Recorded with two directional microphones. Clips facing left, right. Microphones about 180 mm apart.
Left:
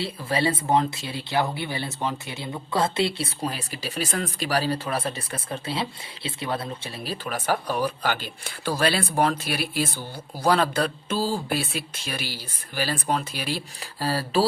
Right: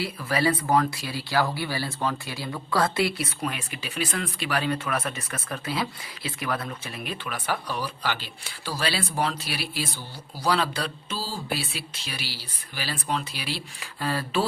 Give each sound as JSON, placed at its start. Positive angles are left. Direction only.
{"t": 0.0, "sound": "speech", "side_deg": 25}